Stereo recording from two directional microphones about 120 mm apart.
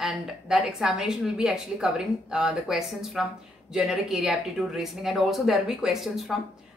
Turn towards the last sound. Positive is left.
turn(degrees=0)  # may be behind; listen again after turning